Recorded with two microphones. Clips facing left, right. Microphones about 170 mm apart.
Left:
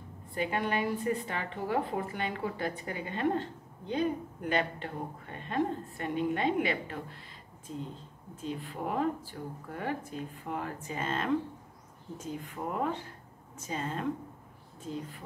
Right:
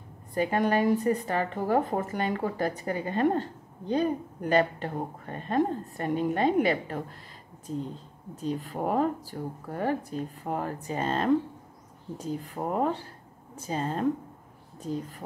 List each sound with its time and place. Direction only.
0.3 s a woman's voice: 40° right (ahead or behind)
8.4 s a woman's voice: 40° right (ahead or behind)